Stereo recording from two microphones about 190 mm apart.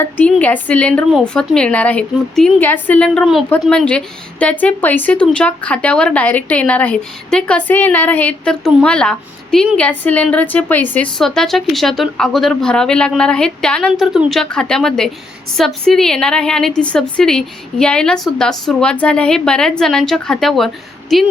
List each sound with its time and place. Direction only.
0.0 s a woman's voice: 10° left (ahead or behind)